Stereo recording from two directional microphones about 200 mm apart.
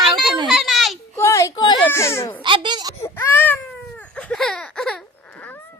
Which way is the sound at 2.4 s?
25° right (ahead or behind).